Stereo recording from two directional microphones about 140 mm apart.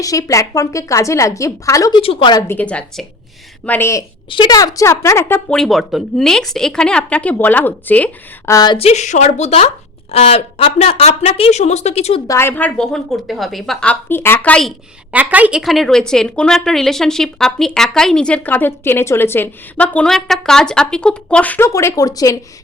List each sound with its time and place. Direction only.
0.0 s a woman's voice: 25° left (ahead or behind)
2.0 s a woman's voice: 40° left (ahead or behind)
2.5 s speech: 10° left (ahead or behind)
3.7 s speech: 20° left (ahead or behind)
4.3 s a woman's voice: 30° left (ahead or behind)
5.5 s speech: centre (ahead or behind)
8.5 s a woman's voice: 30° left (ahead or behind)
8.8 s a woman's voice: 55° left (ahead or behind)
12.3 s speech: 15° left (ahead or behind)
15.1 s a woman's voice: 10° right (ahead or behind); by 21.7 s 10° left (ahead or behind)
21.7 s a woman's voice: 20° left (ahead or behind)